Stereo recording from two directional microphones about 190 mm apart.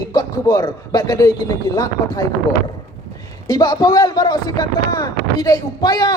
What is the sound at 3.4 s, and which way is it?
Speech, 20° left (ahead or behind).